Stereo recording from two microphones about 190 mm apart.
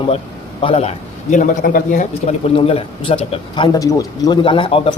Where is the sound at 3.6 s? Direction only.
20° left (ahead or behind).